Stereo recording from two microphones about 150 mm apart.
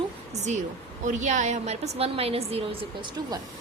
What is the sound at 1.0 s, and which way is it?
A woman's voice, 55° right (ahead or behind).